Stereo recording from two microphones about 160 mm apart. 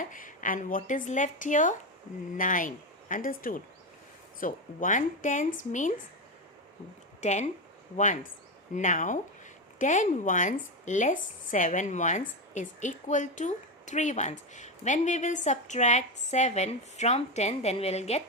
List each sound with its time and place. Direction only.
0.0 s speech: 55° left (ahead or behind)
7.2 s speech: 45° left (ahead or behind)